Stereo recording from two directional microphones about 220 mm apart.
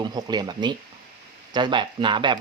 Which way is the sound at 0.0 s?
20° right (ahead or behind).